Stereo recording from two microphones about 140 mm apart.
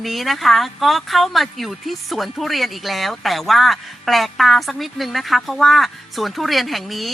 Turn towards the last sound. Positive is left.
turn(degrees=0)  # may be behind; listen again after turning